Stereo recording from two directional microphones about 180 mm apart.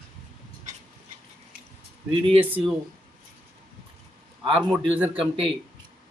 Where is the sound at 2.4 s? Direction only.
10° right (ahead or behind).